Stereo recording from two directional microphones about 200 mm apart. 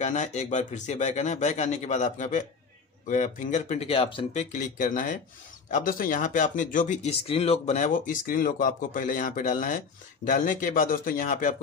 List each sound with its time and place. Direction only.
0.0 s speech: 35° left (ahead or behind)